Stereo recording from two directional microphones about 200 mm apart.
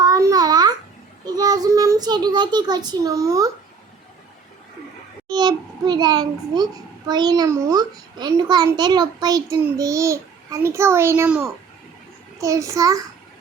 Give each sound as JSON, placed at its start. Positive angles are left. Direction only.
{"t": 0.0, "sound": "babbling", "side_deg": -20}
{"t": 1.2, "sound": "a child's voice", "side_deg": -20}
{"t": 5.3, "sound": "a child's voice", "side_deg": -20}